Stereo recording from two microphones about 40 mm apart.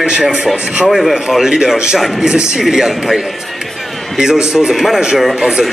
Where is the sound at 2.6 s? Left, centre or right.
Centre.